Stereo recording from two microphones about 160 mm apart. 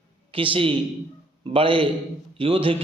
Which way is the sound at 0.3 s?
35° right (ahead or behind).